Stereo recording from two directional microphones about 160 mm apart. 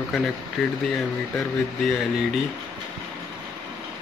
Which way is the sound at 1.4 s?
Centre (ahead or behind).